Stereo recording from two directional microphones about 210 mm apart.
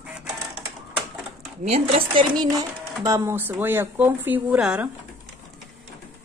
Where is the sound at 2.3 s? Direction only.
20° right (ahead or behind).